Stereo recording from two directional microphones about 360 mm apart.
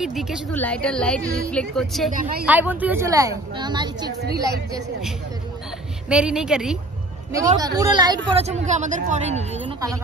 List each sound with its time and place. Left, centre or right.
0.0 s a woman's voice: centre
2.1 s a woman's voice: right
2.4 s a woman's voice: centre